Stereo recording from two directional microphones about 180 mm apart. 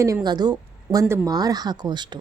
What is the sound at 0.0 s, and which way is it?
A woman's voice, 20° right (ahead or behind).